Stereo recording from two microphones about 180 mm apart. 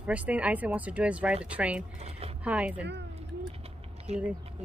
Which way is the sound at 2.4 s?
5° right (ahead or behind).